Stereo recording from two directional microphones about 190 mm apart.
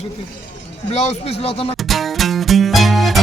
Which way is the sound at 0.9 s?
35° left (ahead or behind).